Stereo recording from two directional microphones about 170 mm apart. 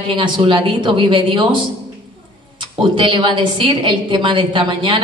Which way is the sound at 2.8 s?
30° right (ahead or behind).